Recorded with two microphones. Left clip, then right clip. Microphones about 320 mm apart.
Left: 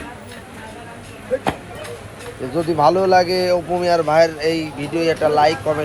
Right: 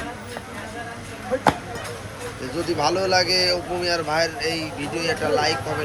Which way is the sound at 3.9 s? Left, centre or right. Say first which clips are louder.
Left 9 dB; centre.